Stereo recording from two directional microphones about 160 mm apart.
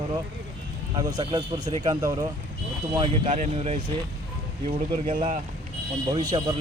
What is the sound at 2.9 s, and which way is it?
Speech, 30° right (ahead or behind).